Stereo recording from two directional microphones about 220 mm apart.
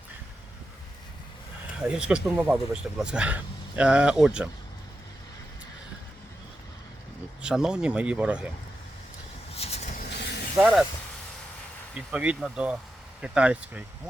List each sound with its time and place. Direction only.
1.8 s speech: 5° right (ahead or behind)
7.4 s speech: 5° right (ahead or behind)
9.6 s vehicle: 30° left (ahead or behind)
10.6 s speech: centre (ahead or behind)
11.9 s speech: 5° right (ahead or behind)